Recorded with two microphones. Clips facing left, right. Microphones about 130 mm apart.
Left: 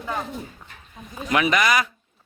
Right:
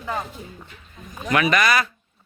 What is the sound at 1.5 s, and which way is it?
Speech, 15° left (ahead or behind).